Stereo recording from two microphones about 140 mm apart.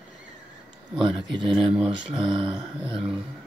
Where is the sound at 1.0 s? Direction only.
35° right (ahead or behind).